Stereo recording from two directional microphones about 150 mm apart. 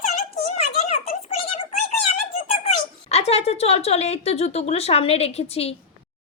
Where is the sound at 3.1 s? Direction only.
45° left (ahead or behind).